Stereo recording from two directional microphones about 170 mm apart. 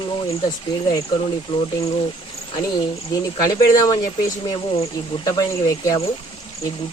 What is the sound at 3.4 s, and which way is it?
Speech, 20° left (ahead or behind).